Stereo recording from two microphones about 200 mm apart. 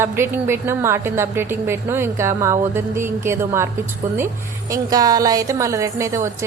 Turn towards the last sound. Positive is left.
turn(degrees=-15)  # may be behind; listen again after turning